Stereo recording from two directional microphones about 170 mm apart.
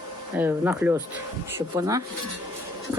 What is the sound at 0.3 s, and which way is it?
Speech, 10° right (ahead or behind).